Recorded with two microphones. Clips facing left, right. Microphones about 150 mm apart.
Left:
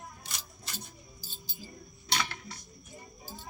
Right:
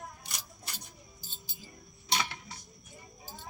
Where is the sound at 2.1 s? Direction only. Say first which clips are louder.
Even; 15° right (ahead or behind).